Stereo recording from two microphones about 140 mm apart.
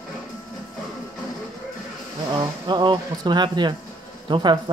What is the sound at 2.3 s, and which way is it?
Speech, 30° right (ahead or behind).